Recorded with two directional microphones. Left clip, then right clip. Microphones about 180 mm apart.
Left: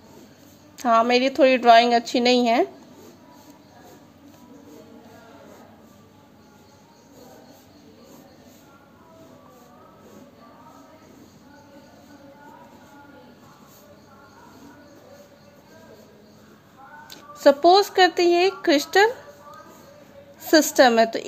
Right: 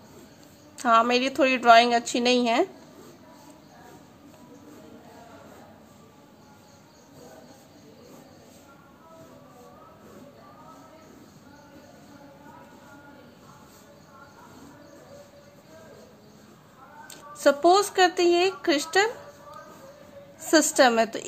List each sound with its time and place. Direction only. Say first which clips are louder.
0.7 s a woman's voice: left 2 dB; 10° left (ahead or behind)
17.1 s a woman's voice: left 5 dB; 15° left (ahead or behind)
20.4 s a woman's voice: left 3 dB; 20° left (ahead or behind)